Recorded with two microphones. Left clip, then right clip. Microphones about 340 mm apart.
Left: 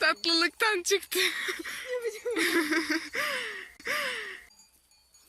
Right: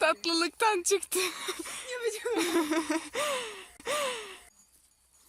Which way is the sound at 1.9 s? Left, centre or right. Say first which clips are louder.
Even; right.